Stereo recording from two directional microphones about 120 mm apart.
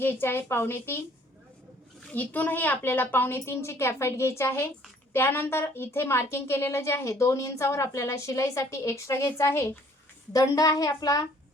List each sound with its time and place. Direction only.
0.0 s a woman's voice: 20° left (ahead or behind)
2.1 s a woman's voice: 15° left (ahead or behind); by 11.2 s 30° left (ahead or behind)